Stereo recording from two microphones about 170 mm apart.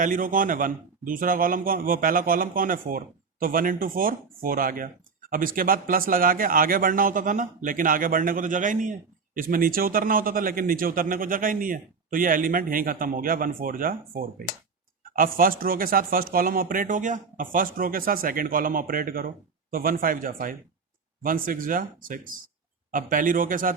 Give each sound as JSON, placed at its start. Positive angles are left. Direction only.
{"t": 0.0, "sound": "speech", "side_deg": -50}